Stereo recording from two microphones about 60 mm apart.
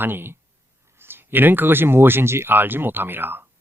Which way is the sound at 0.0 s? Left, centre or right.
Right.